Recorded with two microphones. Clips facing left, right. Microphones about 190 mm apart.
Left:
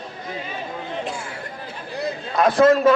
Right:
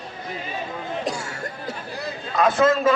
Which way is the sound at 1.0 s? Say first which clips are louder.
Right 1 dB; 40° right (ahead or behind).